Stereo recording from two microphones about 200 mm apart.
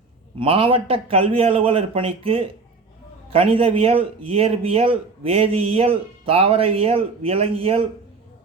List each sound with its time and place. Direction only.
0.3 s speech: 25° right (ahead or behind)